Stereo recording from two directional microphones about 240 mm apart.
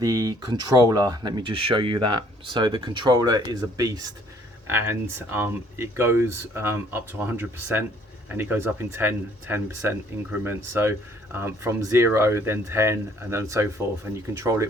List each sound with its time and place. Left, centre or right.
0.0 s speech: centre